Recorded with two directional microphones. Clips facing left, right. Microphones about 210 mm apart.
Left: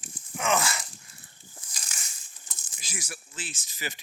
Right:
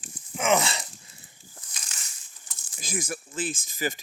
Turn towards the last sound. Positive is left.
turn(degrees=-50)  # may be behind; listen again after turning